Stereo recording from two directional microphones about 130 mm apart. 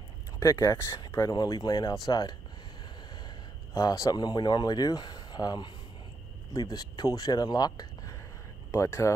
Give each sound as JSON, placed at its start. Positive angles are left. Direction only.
{"t": 0.4, "sound": "speech", "side_deg": 30}